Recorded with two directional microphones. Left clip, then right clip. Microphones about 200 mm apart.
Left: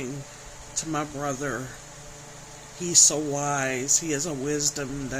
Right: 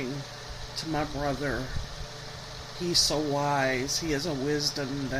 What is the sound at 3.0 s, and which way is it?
Speech, 25° left (ahead or behind).